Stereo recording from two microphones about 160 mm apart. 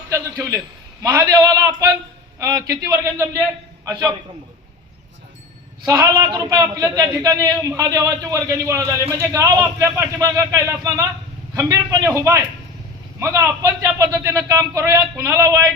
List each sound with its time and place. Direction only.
0.1 s a man's voice: 20° right (ahead or behind)
5.8 s a man's voice: 20° right (ahead or behind)